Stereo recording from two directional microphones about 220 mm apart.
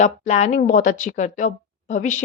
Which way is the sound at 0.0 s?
30° left (ahead or behind).